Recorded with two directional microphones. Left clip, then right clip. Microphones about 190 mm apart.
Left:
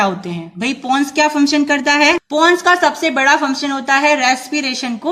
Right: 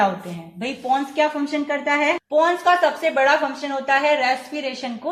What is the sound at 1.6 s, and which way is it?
Speech, 25° left (ahead or behind).